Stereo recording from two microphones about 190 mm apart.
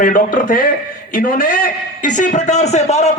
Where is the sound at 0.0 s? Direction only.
45° left (ahead or behind).